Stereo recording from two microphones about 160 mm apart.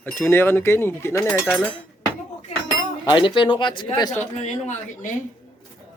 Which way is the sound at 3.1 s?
30° left (ahead or behind).